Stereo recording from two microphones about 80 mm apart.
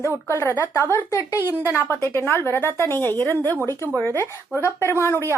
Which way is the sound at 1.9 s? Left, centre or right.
Left.